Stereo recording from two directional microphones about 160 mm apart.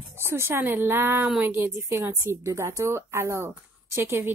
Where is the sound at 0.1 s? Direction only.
15° right (ahead or behind).